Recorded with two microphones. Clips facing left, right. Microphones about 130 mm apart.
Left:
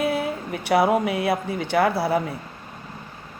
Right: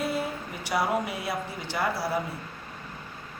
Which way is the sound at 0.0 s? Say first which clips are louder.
Left 6 dB; 60° left (ahead or behind).